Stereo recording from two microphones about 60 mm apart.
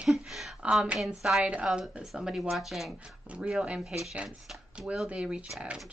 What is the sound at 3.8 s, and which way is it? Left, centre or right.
Speech, centre.